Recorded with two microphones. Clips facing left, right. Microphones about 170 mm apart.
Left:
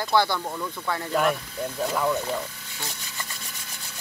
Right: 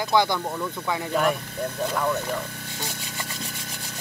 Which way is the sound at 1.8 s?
Centre (ahead or behind).